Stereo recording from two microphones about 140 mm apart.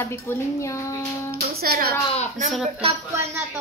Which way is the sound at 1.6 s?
90° right.